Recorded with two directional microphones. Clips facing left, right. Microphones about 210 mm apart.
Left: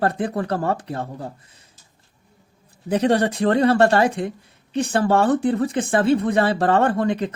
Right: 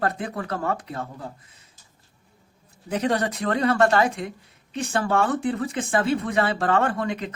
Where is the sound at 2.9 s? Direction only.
30° left (ahead or behind).